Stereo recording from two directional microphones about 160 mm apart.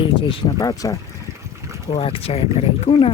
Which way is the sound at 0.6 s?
20° left (ahead or behind).